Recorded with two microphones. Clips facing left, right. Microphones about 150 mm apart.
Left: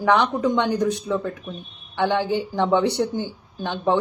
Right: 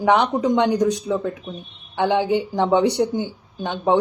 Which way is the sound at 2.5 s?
15° right (ahead or behind).